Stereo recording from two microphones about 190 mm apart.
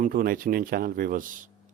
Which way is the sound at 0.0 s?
50° right (ahead or behind).